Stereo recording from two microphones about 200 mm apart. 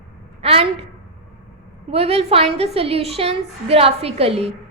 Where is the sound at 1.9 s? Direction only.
30° right (ahead or behind).